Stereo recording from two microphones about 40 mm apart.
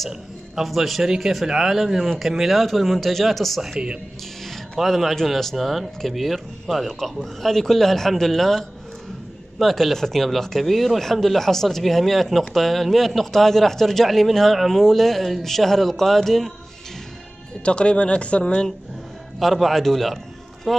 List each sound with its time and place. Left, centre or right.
0.7 s speech: centre
1.0 s a man's voice: centre
17.6 s speech: left
19.4 s a man's voice: centre